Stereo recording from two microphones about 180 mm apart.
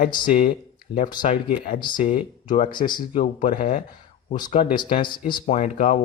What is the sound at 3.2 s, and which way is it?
Speech, 40° left (ahead or behind).